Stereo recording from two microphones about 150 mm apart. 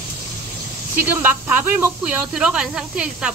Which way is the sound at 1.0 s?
15° right (ahead or behind).